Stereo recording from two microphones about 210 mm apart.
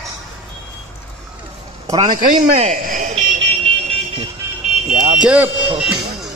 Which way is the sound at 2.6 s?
35° right (ahead or behind).